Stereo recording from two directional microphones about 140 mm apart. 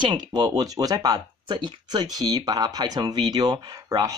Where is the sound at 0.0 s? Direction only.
30° right (ahead or behind).